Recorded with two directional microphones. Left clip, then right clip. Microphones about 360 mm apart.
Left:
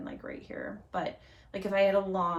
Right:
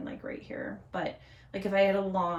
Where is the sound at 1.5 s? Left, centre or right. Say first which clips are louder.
Even; centre.